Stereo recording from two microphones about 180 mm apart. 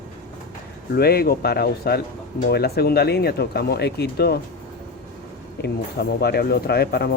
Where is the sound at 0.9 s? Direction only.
60° left (ahead or behind).